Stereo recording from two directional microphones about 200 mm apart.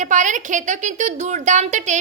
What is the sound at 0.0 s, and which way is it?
A woman's voice, 40° right (ahead or behind).